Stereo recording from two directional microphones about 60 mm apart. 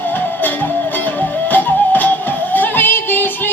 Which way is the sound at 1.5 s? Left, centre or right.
Left.